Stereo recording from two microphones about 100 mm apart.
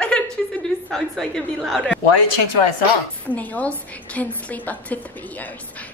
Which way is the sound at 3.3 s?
15° left (ahead or behind).